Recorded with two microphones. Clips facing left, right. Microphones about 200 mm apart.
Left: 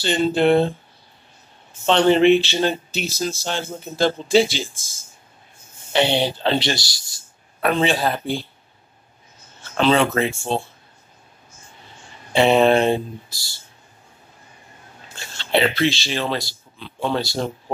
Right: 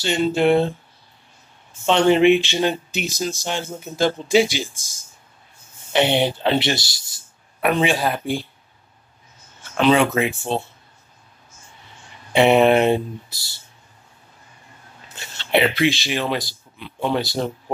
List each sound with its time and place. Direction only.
0.0 s speech: 5° right (ahead or behind)
1.9 s speech: 10° right (ahead or behind)
5.9 s speech: 20° right (ahead or behind)
9.8 s speech: 15° right (ahead or behind)
12.3 s speech: 15° right (ahead or behind)
15.3 s speech: 15° right (ahead or behind)